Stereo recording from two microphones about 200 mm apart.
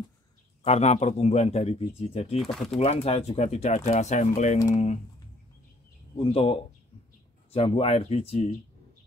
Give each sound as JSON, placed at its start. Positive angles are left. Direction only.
{"t": 0.7, "sound": "speech", "side_deg": 30}
{"t": 2.3, "sound": "speech", "side_deg": 0}
{"t": 2.7, "sound": "speech", "side_deg": 30}
{"t": 6.1, "sound": "speech", "side_deg": 25}